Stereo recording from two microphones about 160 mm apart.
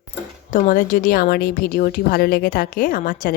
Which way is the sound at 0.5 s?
55° left (ahead or behind).